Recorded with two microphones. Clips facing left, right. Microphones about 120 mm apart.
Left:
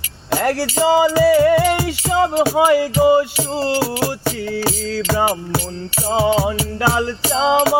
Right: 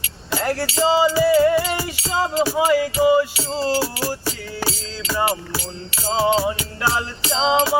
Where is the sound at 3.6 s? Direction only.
60° left (ahead or behind).